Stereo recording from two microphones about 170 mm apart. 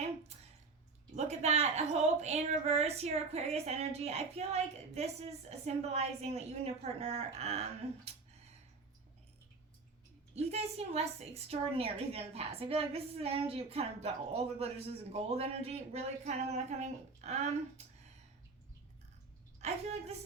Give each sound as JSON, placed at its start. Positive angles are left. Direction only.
{"t": 1.1, "sound": "a woman's voice", "side_deg": -40}
{"t": 10.3, "sound": "a woman's voice", "side_deg": -40}
{"t": 19.5, "sound": "a woman's voice", "side_deg": -40}